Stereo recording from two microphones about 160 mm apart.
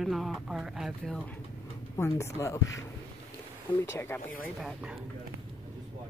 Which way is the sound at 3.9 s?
15° left (ahead or behind).